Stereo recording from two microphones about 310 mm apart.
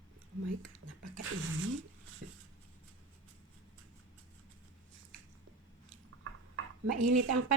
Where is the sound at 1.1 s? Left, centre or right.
Right.